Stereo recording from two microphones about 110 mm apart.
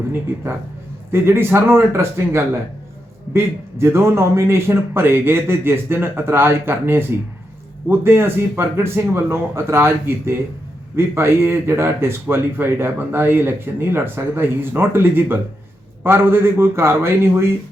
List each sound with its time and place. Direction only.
1.1 s speech: 20° right (ahead or behind)